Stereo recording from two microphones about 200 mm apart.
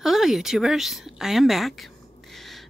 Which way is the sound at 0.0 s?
Centre (ahead or behind).